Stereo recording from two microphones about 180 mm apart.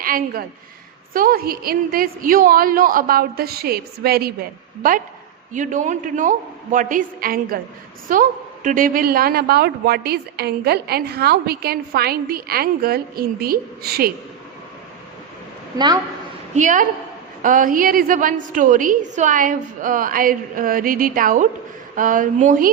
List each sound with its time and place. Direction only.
0.0 s a woman's voice: 55° right (ahead or behind)
4.8 s a woman's voice: 50° right (ahead or behind)
16.6 s a woman's voice: 45° right (ahead or behind)